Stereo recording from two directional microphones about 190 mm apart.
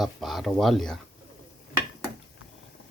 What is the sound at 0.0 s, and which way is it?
Speech, centre (ahead or behind).